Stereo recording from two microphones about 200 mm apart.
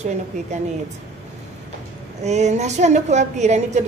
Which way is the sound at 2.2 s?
35° right (ahead or behind).